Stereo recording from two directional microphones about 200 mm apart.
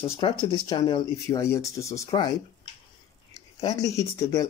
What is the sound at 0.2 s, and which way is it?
Speech, 20° left (ahead or behind).